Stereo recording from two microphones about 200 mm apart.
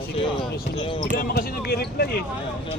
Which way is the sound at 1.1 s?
50° left (ahead or behind).